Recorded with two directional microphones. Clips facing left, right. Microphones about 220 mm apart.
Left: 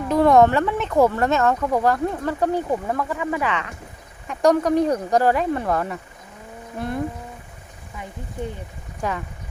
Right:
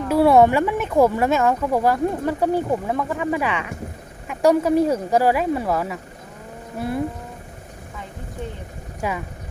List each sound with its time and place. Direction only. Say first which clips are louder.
0.1 s speech: right 1 dB; 10° right (ahead or behind)
3.2 s speech: right 2 dB; 20° right (ahead or behind)
4.3 s speech: right 1 dB; 5° right (ahead or behind)
9.0 s speech: right 1 dB; 10° right (ahead or behind)